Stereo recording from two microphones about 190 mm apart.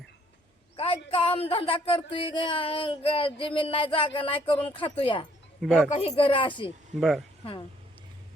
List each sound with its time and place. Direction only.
0.8 s speech: 30° left (ahead or behind)
5.6 s speech: centre (ahead or behind)
5.9 s speech: 35° left (ahead or behind)
7.0 s speech: centre (ahead or behind)